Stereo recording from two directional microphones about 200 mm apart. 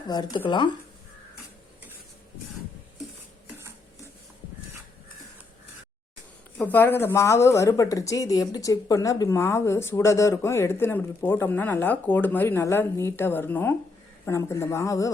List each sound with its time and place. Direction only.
0.1 s speech: 20° left (ahead or behind)
6.6 s a woman's voice: 10° left (ahead or behind)